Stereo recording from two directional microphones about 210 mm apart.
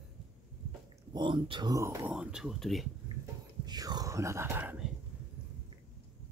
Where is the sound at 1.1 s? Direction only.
20° right (ahead or behind).